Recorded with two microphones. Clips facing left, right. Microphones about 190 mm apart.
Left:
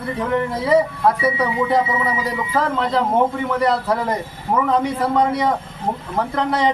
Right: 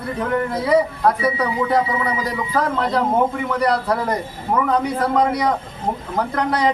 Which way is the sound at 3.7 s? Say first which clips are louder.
Even; centre (ahead or behind).